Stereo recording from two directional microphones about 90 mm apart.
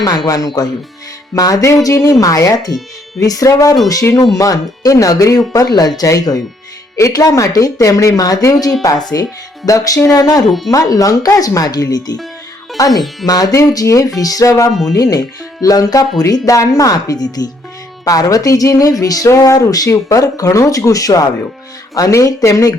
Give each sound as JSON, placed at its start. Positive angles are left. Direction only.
{"t": 0.3, "sound": "a woman's voice", "side_deg": 45}
{"t": 14.7, "sound": "speech", "side_deg": 0}
{"t": 14.9, "sound": "a woman's voice", "side_deg": 40}